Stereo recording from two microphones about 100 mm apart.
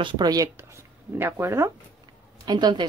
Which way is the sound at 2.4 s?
45° right (ahead or behind).